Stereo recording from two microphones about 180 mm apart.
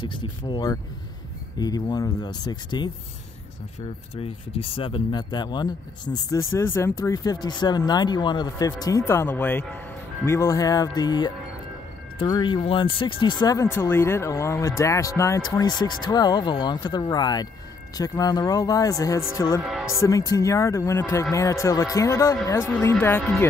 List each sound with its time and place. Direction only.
0.0 s speech: 25° left (ahead or behind)
4.1 s speech: 30° left (ahead or behind); by 19.6 s 15° left (ahead or behind)
19.6 s music: centre (ahead or behind)
20.0 s speech: 20° left (ahead or behind)